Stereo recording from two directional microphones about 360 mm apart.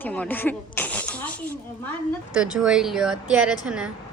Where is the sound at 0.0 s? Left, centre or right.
Centre.